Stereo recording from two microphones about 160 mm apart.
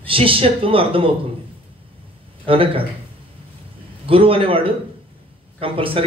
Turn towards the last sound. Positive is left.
turn(degrees=-35)  # may be behind; listen again after turning